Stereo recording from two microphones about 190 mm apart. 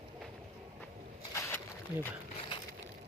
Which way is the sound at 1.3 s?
15° left (ahead or behind).